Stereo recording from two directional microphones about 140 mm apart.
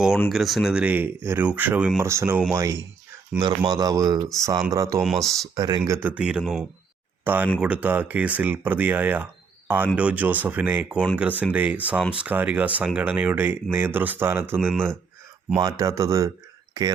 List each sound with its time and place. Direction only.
0.3 s speech: centre (ahead or behind); by 5.0 s 25° right (ahead or behind)
5.0 s speech: centre (ahead or behind)
5.5 s speech: 30° right (ahead or behind)
6.0 s speech: 10° right (ahead or behind)